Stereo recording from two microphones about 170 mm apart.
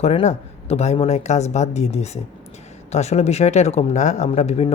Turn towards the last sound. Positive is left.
turn(degrees=40)  # may be behind; listen again after turning